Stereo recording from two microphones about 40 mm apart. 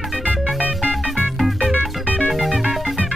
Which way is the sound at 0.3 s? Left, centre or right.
Right.